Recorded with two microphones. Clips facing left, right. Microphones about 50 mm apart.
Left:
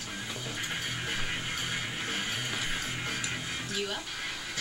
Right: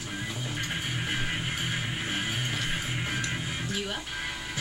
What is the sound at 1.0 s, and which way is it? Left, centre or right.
Music, centre.